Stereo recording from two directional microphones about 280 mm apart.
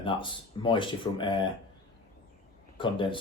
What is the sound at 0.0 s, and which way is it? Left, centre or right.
Speech, centre.